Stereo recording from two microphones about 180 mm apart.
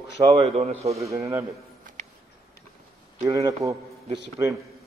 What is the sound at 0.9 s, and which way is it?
Speech, 15° right (ahead or behind).